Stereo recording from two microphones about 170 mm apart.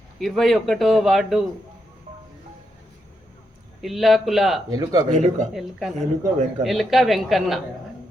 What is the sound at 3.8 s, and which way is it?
Speech, centre (ahead or behind).